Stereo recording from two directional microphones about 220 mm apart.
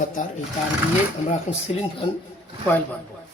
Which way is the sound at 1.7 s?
30° left (ahead or behind).